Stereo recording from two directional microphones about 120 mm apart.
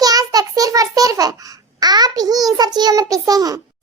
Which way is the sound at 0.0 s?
30° right (ahead or behind).